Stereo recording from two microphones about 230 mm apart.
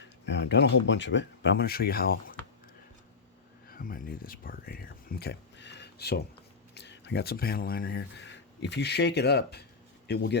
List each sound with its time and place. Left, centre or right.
0.0 s speech: left
3.7 s a man's voice: left